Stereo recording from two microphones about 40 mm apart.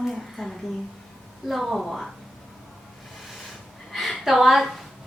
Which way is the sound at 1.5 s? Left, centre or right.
Centre.